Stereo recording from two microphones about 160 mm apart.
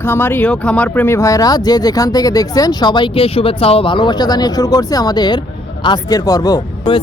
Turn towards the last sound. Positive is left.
turn(degrees=25)  # may be behind; listen again after turning